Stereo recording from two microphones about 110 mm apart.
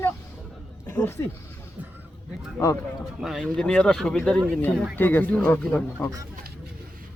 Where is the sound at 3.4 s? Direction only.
10° left (ahead or behind).